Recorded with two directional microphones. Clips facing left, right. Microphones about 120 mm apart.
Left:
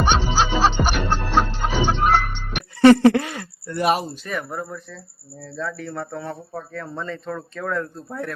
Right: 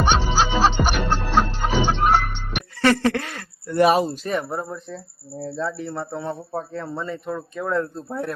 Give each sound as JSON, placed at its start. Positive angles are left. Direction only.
{"t": 0.0, "sound": "music", "side_deg": 0}
{"t": 2.8, "sound": "a sound", "side_deg": 20}
{"t": 3.7, "sound": "speech", "side_deg": -5}
{"t": 4.2, "sound": "speech", "side_deg": -25}
{"t": 6.9, "sound": "speech", "side_deg": -15}
{"t": 7.7, "sound": "speech", "side_deg": -25}